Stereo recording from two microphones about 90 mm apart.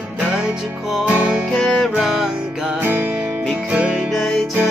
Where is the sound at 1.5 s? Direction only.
5° left (ahead or behind).